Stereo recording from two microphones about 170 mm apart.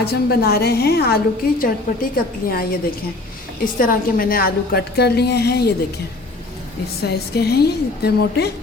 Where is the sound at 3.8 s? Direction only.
55° left (ahead or behind); by 5.7 s 70° left (ahead or behind).